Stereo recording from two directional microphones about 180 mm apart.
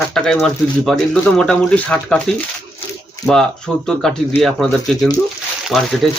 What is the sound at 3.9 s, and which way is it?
Speech, 5° left (ahead or behind).